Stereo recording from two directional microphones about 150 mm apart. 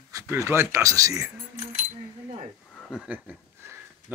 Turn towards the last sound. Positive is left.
turn(degrees=-10)  # may be behind; listen again after turning